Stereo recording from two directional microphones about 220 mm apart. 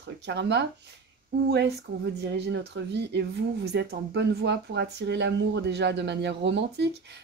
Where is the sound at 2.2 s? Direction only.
50° right (ahead or behind).